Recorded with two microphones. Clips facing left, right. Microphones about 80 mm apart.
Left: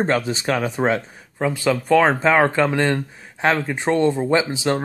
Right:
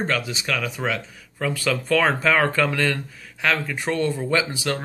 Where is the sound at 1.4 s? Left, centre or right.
Left.